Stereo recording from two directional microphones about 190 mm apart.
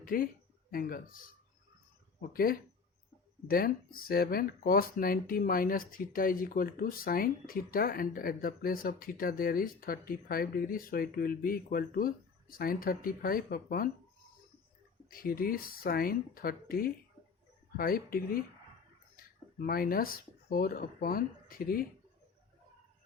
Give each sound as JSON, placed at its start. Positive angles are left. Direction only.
{"t": 0.0, "sound": "speech", "side_deg": 50}
{"t": 2.3, "sound": "speech", "side_deg": 50}
{"t": 15.1, "sound": "speech", "side_deg": 50}
{"t": 19.6, "sound": "speech", "side_deg": 50}